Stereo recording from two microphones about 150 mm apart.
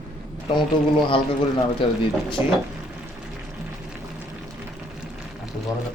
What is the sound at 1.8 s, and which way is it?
Speech, 35° left (ahead or behind).